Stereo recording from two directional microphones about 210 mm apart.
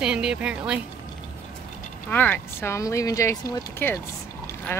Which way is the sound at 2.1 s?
10° left (ahead or behind).